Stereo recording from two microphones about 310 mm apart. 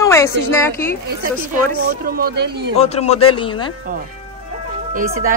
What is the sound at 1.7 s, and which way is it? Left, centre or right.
Speech, right.